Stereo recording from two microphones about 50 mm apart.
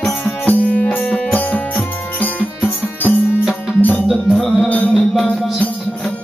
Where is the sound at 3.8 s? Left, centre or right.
Left.